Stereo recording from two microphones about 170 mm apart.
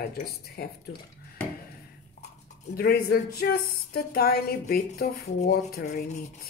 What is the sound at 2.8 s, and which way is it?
Speech, 65° left (ahead or behind).